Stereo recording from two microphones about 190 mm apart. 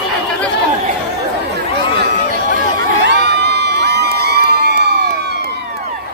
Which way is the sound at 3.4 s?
60° right (ahead or behind).